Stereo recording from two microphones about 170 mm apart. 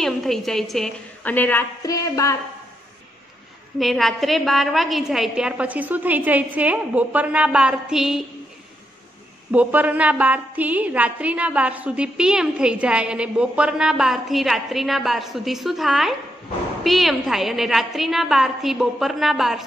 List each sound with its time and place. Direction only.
0.0 s a woman's voice: centre (ahead or behind); by 2.3 s 20° left (ahead or behind)
3.8 s a woman's voice: centre (ahead or behind)
9.5 s a woman's voice: 10° right (ahead or behind)